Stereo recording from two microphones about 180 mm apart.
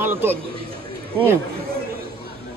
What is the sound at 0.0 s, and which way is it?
Speech, 10° right (ahead or behind).